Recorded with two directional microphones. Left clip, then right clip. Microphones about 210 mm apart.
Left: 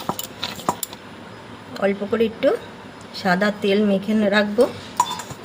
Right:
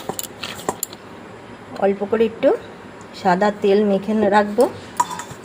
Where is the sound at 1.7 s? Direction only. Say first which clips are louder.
Right 3 dB; 10° right (ahead or behind).